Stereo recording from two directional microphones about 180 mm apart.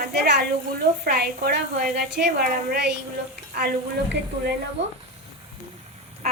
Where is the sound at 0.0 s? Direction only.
65° right (ahead or behind).